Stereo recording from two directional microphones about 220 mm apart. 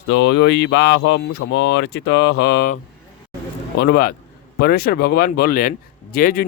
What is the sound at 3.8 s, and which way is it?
Speech, 45° left (ahead or behind).